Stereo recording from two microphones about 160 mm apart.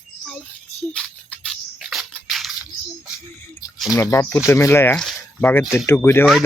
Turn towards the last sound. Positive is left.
turn(degrees=15)  # may be behind; listen again after turning